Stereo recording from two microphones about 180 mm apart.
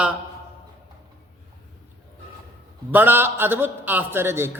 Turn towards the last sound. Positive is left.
turn(degrees=-15)  # may be behind; listen again after turning